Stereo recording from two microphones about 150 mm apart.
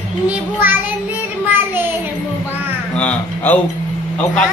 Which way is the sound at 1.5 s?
15° right (ahead or behind).